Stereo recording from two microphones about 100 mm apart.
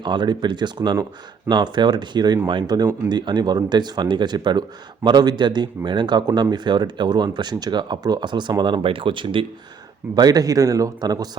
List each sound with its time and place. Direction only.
0.0 s speech: 50° right (ahead or behind)
10.2 s a man's voice: 40° right (ahead or behind)